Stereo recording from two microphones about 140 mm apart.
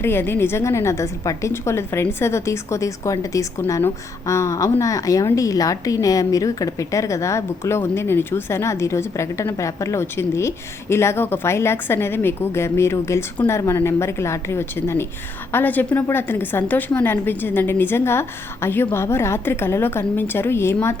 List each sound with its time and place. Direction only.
0.0 s a woman's voice: 15° left (ahead or behind)